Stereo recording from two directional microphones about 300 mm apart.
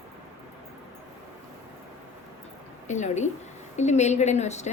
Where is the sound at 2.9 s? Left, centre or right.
Left.